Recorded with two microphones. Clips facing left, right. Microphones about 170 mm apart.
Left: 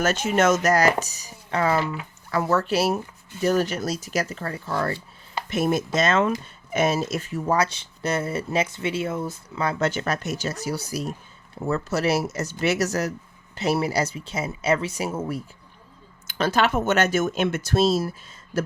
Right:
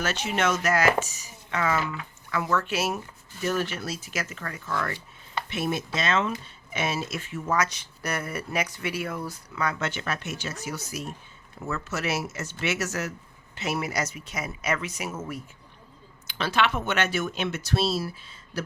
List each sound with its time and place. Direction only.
0.0 s speech: 45° left (ahead or behind)
5.5 s speech: 45° left (ahead or behind)
16.2 s speech: 45° left (ahead or behind)